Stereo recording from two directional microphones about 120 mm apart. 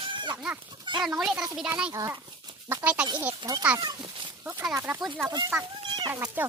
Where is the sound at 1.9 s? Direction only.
25° right (ahead or behind).